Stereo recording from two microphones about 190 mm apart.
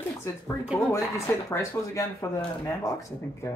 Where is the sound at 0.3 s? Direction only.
15° left (ahead or behind).